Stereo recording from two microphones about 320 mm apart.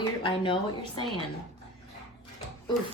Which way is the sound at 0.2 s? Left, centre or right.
Centre.